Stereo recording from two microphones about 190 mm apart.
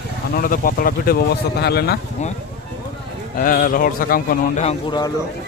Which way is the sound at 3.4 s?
45° left (ahead or behind).